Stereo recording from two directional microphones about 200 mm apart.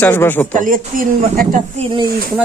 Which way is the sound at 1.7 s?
25° right (ahead or behind).